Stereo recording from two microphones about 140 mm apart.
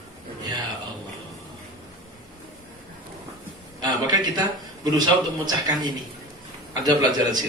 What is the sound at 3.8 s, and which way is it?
A man's voice, 30° right (ahead or behind).